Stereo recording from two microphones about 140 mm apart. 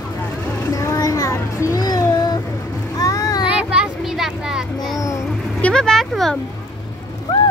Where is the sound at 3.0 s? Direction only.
25° left (ahead or behind).